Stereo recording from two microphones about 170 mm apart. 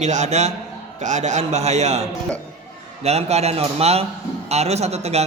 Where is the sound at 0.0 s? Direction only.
45° right (ahead or behind).